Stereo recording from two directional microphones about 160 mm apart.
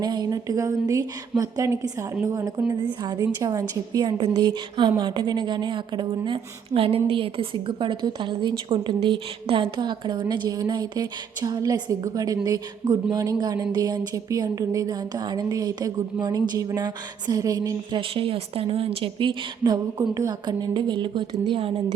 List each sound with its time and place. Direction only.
0.0 s a woman's voice: 25° right (ahead or behind)